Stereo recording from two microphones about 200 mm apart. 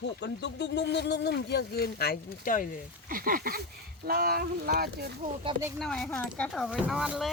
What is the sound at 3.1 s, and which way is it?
Speech, 45° right (ahead or behind).